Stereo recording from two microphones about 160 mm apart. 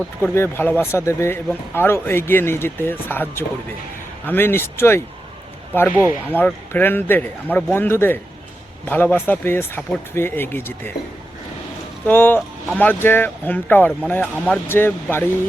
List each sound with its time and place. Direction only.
0.3 s speech: 15° left (ahead or behind)
12.0 s speech: 15° left (ahead or behind)